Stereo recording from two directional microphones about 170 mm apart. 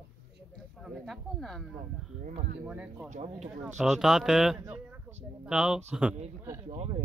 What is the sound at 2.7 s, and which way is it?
Speech, 10° right (ahead or behind).